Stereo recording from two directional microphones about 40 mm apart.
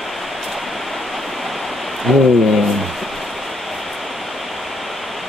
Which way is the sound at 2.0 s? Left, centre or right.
Centre.